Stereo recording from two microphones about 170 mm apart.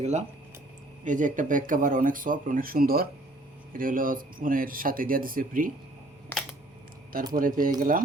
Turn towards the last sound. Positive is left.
turn(degrees=-55)  # may be behind; listen again after turning